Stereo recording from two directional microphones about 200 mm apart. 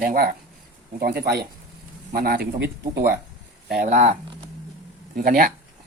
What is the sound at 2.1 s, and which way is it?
Speech, 50° right (ahead or behind).